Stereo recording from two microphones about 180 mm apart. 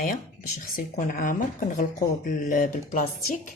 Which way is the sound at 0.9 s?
50° left (ahead or behind).